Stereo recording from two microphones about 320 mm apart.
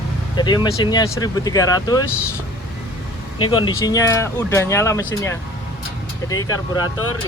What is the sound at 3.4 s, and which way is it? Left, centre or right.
Speech, centre.